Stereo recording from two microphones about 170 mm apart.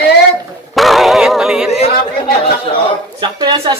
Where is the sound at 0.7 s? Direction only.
Centre (ahead or behind).